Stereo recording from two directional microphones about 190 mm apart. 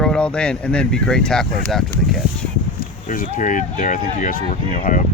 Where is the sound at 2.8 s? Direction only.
45° left (ahead or behind).